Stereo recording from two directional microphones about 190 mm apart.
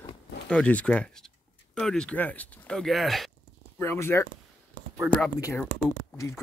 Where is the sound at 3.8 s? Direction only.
10° left (ahead or behind).